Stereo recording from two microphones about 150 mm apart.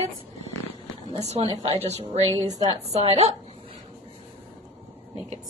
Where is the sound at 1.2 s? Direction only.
45° right (ahead or behind).